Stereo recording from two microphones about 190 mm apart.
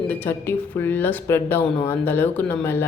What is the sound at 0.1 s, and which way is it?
Speech, 10° left (ahead or behind).